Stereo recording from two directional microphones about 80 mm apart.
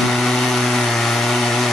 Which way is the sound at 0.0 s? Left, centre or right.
Centre.